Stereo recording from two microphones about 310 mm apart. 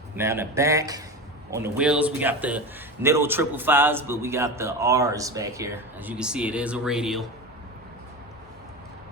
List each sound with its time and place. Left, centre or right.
0.2 s a man's voice: centre